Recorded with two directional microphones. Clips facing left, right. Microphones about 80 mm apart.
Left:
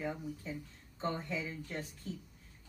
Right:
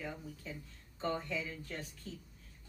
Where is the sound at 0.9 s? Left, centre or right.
Left.